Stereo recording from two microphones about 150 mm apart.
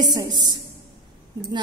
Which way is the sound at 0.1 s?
30° right (ahead or behind).